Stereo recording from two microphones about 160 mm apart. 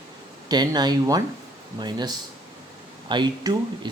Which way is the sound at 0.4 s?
25° right (ahead or behind).